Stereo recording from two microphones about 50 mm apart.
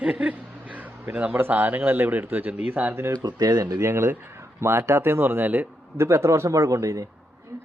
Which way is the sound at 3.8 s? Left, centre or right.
Right.